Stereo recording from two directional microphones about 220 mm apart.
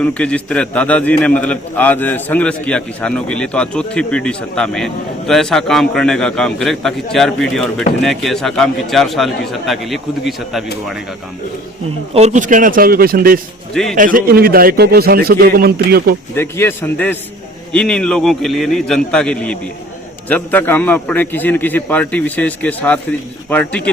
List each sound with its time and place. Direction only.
0.0 s a man's voice: 5° left (ahead or behind)
12.1 s a man's voice: 30° right (ahead or behind)
16.3 s a man's voice: 10° left (ahead or behind)